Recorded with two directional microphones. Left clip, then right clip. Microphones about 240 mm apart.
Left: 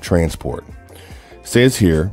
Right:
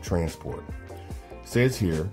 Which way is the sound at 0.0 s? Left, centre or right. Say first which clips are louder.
Left 11 dB; left.